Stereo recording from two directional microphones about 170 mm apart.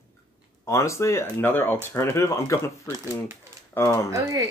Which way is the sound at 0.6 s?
15° left (ahead or behind).